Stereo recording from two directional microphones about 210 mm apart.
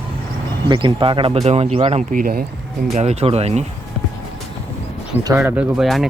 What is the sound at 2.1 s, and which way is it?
Speech, 45° right (ahead or behind).